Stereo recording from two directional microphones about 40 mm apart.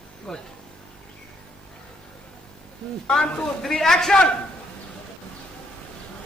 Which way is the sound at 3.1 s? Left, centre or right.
Centre.